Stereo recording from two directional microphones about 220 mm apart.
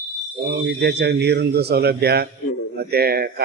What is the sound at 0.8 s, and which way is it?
A man's voice, 50° right (ahead or behind).